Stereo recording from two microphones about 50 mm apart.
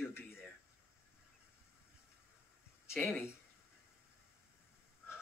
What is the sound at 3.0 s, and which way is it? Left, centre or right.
Speech, left.